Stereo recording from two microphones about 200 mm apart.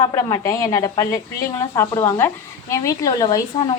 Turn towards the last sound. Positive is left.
turn(degrees=20)  # may be behind; listen again after turning